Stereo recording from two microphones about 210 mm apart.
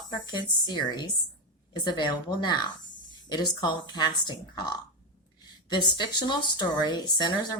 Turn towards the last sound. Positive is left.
turn(degrees=20)  # may be behind; listen again after turning